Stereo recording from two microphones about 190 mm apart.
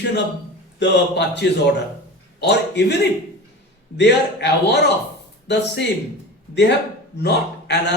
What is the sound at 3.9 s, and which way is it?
Speech, 65° left (ahead or behind).